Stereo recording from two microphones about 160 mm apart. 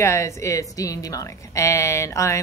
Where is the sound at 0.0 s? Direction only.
15° left (ahead or behind).